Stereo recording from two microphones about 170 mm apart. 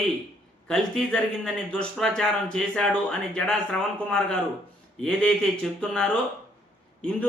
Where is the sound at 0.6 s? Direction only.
5° left (ahead or behind).